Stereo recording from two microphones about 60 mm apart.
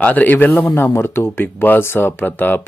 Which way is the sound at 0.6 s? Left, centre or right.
Left.